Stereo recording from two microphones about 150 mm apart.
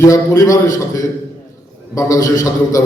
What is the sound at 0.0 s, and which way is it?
Speech, 20° left (ahead or behind).